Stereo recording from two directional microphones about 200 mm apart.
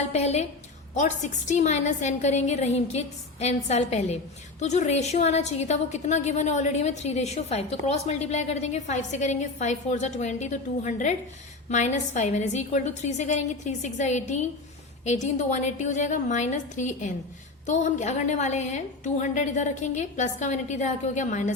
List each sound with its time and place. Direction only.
0.0 s a woman's voice: 35° left (ahead or behind)